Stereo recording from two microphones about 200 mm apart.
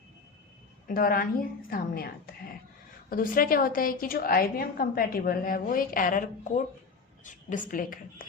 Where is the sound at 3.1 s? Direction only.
45° left (ahead or behind).